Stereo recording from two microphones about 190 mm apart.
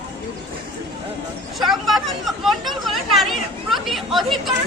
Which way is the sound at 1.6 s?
Centre (ahead or behind).